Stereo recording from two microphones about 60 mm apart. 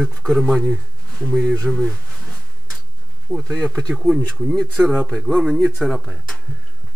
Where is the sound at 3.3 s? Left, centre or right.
Centre.